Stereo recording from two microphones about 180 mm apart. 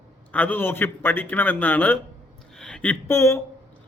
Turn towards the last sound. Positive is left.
turn(degrees=15)  # may be behind; listen again after turning